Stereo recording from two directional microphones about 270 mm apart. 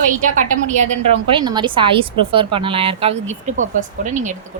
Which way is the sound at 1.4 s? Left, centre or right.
Centre.